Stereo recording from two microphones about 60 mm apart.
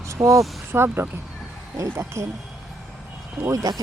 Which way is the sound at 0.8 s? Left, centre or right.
Right.